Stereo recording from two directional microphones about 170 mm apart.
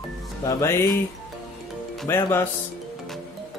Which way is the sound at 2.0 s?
15° left (ahead or behind).